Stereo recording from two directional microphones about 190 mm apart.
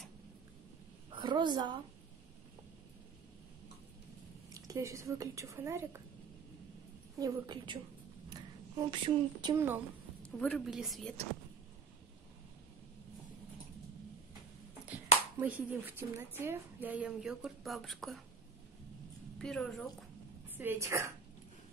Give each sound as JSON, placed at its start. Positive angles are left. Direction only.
{"t": 1.1, "sound": "a sound", "side_deg": -25}
{"t": 4.6, "sound": "a woman's voice", "side_deg": -15}
{"t": 7.2, "sound": "a woman's voice", "side_deg": -20}
{"t": 10.2, "sound": "a woman's voice", "side_deg": 5}
{"t": 15.3, "sound": "a woman's voice", "side_deg": -10}
{"t": 19.3, "sound": "a woman's voice", "side_deg": 5}
{"t": 20.5, "sound": "a woman's voice", "side_deg": -10}